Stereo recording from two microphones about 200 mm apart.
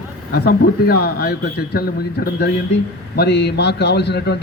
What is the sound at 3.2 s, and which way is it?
A man's voice, 55° left (ahead or behind).